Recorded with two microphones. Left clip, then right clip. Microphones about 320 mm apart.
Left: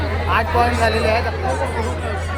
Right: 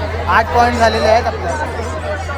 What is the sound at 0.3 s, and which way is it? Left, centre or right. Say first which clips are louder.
Speech: right 6 dB; right.